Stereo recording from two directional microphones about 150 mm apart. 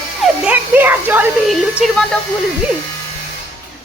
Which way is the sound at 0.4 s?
10° right (ahead or behind).